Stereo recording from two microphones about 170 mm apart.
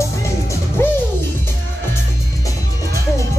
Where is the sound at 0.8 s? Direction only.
15° left (ahead or behind).